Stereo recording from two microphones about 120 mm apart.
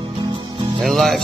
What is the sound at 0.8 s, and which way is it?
Music, centre (ahead or behind).